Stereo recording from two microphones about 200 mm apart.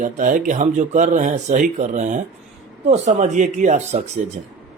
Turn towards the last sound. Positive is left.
turn(degrees=-35)  # may be behind; listen again after turning